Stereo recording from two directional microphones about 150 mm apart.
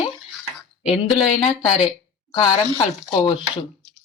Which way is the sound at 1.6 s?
35° left (ahead or behind).